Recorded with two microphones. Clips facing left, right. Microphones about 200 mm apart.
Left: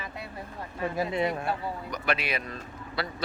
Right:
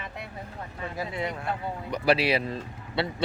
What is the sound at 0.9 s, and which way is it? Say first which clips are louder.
Speech: left 4 dB; 20° left (ahead or behind).